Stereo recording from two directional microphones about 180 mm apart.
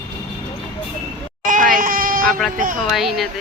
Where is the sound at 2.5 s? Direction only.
45° right (ahead or behind).